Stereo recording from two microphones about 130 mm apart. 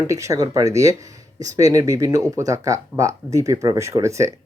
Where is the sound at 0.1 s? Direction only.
25° right (ahead or behind).